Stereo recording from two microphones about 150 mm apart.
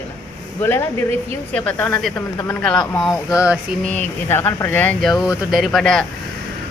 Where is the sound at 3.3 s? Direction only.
5° right (ahead or behind).